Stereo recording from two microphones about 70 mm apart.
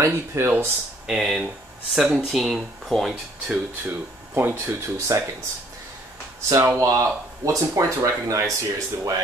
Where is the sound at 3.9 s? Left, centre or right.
Right.